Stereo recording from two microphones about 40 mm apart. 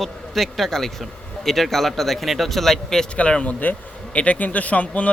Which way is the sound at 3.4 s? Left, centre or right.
Left.